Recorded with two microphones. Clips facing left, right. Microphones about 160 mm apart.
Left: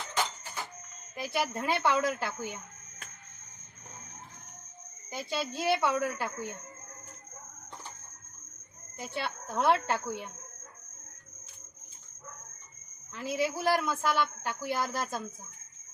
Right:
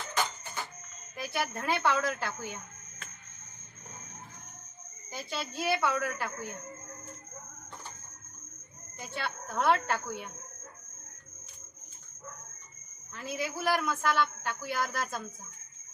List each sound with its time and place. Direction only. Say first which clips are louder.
1.1 s a woman's voice: left 2 dB; 20° left (ahead or behind)
5.1 s a woman's voice: left 3 dB; 25° left (ahead or behind)
9.0 s a woman's voice: left 2 dB; 25° left (ahead or behind)
13.1 s a woman's voice: left 4 dB; 25° left (ahead or behind)